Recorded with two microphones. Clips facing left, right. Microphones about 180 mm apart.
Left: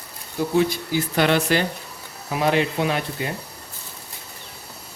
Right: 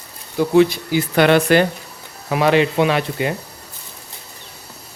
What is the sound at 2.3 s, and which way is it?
Speech, 80° right.